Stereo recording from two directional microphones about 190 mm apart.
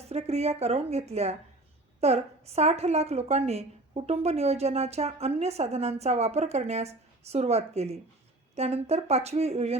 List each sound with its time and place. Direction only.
0.1 s a woman's voice: 35° right (ahead or behind)